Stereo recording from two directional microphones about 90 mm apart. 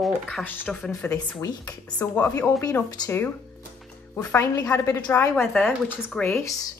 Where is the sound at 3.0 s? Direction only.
50° left (ahead or behind).